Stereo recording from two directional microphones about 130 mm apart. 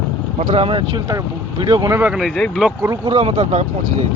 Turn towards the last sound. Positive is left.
turn(degrees=-50)  # may be behind; listen again after turning